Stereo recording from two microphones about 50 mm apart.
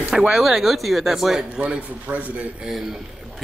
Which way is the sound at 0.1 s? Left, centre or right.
Centre.